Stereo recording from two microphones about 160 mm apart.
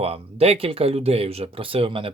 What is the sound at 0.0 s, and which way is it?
Speech, 40° right (ahead or behind).